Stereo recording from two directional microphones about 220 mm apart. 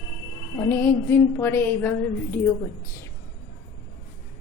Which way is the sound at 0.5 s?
15° left (ahead or behind).